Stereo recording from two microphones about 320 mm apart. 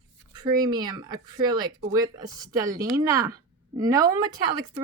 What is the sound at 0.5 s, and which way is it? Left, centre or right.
Speech, centre.